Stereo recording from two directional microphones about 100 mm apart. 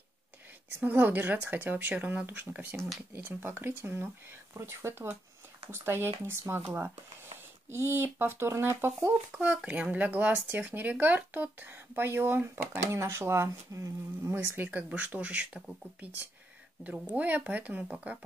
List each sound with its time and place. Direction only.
0.7 s speech: 15° right (ahead or behind)
7.7 s speech: 25° right (ahead or behind)
9.3 s speech: 10° right (ahead or behind)